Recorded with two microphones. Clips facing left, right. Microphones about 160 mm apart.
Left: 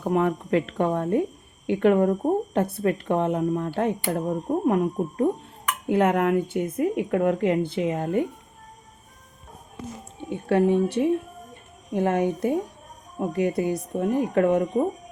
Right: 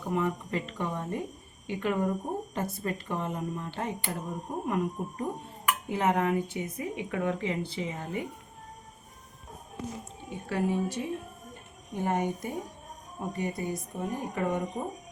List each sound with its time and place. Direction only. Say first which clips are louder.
0.1 s speech: left 8 dB; 65° left (ahead or behind)
10.5 s a woman's voice: left 9 dB; 65° left (ahead or behind)
11.9 s a woman's voice: left 7 dB; 90° left
13.1 s speech: left 9 dB; 80° left